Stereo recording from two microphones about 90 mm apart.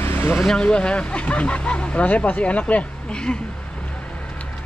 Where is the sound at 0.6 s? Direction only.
10° left (ahead or behind).